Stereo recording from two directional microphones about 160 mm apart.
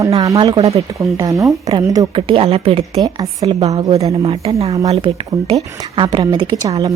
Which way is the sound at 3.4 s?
40° right (ahead or behind).